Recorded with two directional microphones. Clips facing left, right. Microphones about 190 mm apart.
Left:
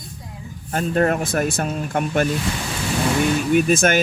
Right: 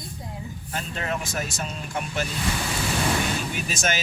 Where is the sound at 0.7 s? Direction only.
50° left (ahead or behind).